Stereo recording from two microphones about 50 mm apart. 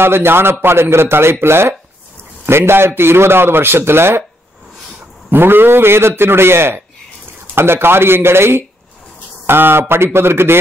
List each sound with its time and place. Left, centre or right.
0.0 s a man's voice: right
5.3 s a man's voice: right